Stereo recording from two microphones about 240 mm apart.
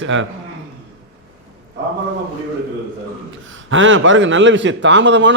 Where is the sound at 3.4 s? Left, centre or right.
Right.